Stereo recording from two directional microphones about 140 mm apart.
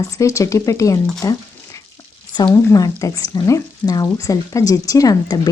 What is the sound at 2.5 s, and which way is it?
Speech, 25° left (ahead or behind).